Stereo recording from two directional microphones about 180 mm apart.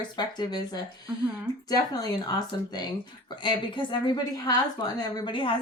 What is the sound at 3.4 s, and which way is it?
A woman's voice, 25° left (ahead or behind).